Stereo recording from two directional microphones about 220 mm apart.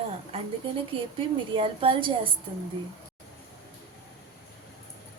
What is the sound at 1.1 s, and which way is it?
Speech, 25° right (ahead or behind).